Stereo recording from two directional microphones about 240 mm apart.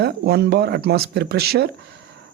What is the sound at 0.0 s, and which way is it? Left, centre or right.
Speech, right.